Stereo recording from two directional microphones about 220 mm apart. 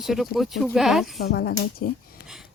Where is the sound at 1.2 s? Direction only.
45° left (ahead or behind).